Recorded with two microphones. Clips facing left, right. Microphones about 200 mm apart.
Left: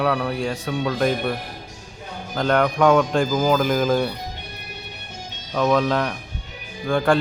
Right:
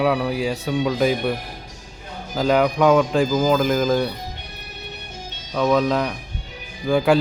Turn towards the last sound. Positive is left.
turn(degrees=-5)  # may be behind; listen again after turning